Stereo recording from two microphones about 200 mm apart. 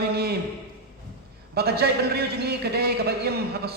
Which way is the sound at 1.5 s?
50° right (ahead or behind).